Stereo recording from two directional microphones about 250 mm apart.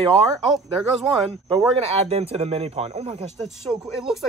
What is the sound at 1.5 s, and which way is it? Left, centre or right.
Speech, right.